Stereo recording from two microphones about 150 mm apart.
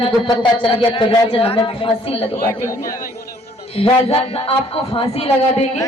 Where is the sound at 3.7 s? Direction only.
40° left (ahead or behind).